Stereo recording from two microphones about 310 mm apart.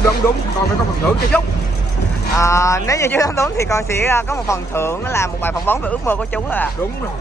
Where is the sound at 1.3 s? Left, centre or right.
Centre.